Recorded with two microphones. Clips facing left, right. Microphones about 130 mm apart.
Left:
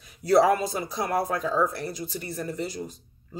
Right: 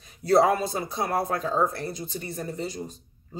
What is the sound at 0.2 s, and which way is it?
Speech, 25° right (ahead or behind).